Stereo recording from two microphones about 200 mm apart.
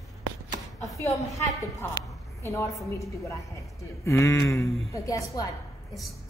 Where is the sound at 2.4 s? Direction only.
15° left (ahead or behind).